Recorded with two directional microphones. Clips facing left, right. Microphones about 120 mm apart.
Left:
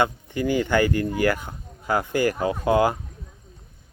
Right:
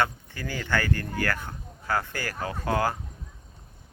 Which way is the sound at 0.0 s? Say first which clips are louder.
Left 6 dB; 15° left (ahead or behind).